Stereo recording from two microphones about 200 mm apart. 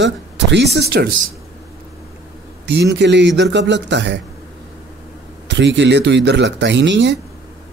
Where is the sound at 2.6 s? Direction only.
60° right (ahead or behind).